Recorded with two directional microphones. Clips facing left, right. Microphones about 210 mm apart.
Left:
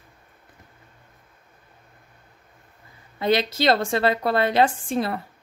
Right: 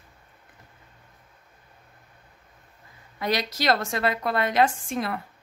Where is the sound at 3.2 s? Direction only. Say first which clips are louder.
Left 5 dB; 25° left (ahead or behind).